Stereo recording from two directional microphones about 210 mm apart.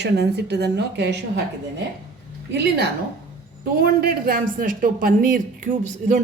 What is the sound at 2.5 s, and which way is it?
A woman's voice, 50° right (ahead or behind).